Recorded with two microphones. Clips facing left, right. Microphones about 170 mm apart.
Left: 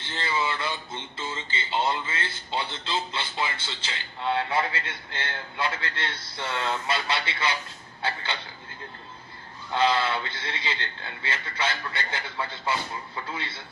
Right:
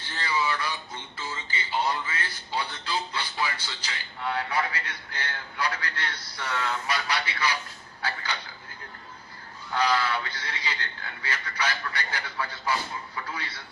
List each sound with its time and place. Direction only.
0.0 s a man's voice: 25° left (ahead or behind)
9.7 s a man's voice: 25° left (ahead or behind)